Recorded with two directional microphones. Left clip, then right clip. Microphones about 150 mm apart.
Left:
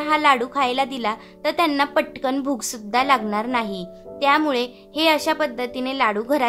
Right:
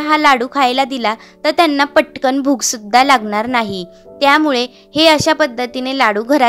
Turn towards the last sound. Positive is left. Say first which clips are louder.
# right 7 dB
turn(degrees=-40)  # may be behind; listen again after turning